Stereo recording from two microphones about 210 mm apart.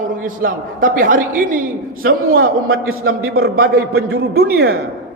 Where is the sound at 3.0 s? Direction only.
45° right (ahead or behind).